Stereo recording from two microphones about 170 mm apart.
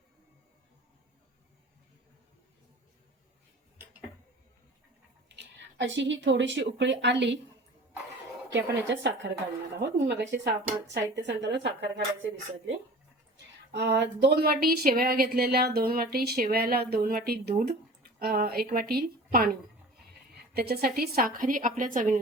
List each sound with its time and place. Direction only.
5.3 s speech: 90° right
8.5 s speech: 90° right
13.7 s a woman's voice: 80° right; by 22.2 s 50° right (ahead or behind)